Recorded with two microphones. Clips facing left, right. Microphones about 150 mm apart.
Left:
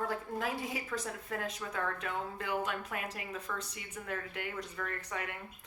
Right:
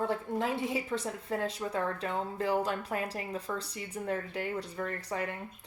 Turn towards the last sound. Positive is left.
turn(degrees=-35)  # may be behind; listen again after turning